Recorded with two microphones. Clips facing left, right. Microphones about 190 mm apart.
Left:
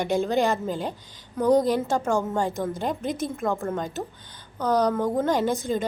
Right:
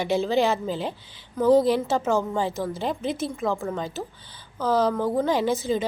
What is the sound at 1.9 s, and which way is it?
A woman's voice, 5° right (ahead or behind).